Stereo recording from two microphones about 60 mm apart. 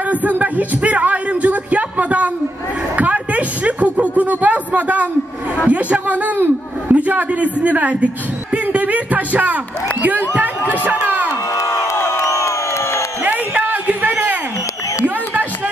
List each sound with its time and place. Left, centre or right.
0.1 s speech: right
3.0 s a sound: right
5.6 s a man's voice: right
10.9 s speech: right
11.5 s crowd: left
13.3 s a sound: right